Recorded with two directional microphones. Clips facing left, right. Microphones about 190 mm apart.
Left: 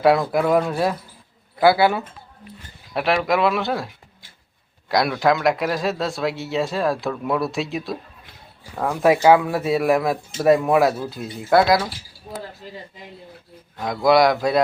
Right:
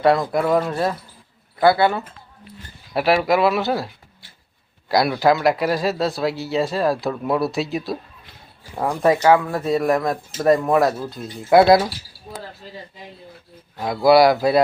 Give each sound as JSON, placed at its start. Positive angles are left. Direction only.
{"t": 0.0, "sound": "speech", "side_deg": 5}
{"t": 4.9, "sound": "speech", "side_deg": 0}
{"t": 11.5, "sound": "speech", "side_deg": -25}
{"t": 12.6, "sound": "speech", "side_deg": 15}
{"t": 13.7, "sound": "speech", "side_deg": -5}